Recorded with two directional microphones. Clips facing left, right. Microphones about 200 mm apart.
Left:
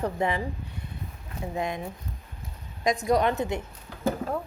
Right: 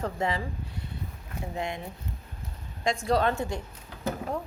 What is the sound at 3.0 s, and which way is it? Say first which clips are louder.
Speech: left 1 dB; 15° left (ahead or behind).